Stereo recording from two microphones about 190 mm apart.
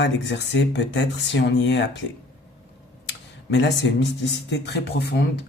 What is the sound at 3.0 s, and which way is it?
Speech, 70° left (ahead or behind).